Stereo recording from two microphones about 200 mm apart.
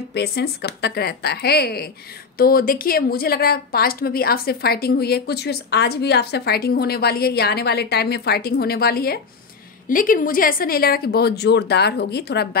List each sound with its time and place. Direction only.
0.1 s a woman's voice: 55° left (ahead or behind)